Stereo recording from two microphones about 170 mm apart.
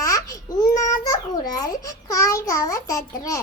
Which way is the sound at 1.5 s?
20° left (ahead or behind).